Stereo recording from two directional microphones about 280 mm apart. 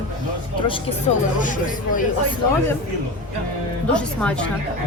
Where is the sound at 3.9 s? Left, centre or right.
Centre.